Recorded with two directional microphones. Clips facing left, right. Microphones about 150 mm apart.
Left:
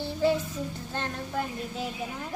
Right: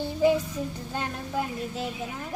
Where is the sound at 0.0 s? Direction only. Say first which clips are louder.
Right 3 dB; 15° right (ahead or behind).